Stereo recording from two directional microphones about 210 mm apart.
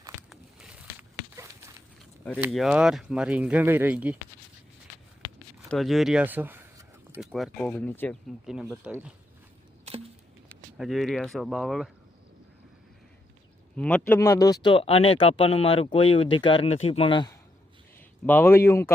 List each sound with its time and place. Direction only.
0.3 s a sound: 5° right (ahead or behind)
2.4 s speech: centre (ahead or behind)
5.7 s a sound: centre (ahead or behind)
7.3 s speech: centre (ahead or behind)
8.7 s speech: 5° right (ahead or behind)
10.8 s speech: centre (ahead or behind)
13.7 s speech: 5° left (ahead or behind); by 17.3 s 25° left (ahead or behind)
18.3 s speech: 10° left (ahead or behind)